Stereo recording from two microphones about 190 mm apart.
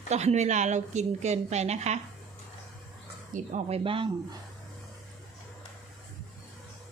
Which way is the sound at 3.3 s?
35° right (ahead or behind).